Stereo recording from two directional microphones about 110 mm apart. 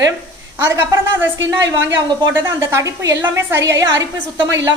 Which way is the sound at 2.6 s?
30° right (ahead or behind).